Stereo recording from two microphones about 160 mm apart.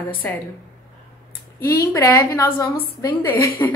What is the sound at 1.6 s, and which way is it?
A woman's voice, 15° left (ahead or behind).